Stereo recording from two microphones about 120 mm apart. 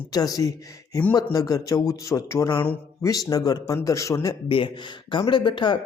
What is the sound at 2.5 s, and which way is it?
Speech, 15° left (ahead or behind).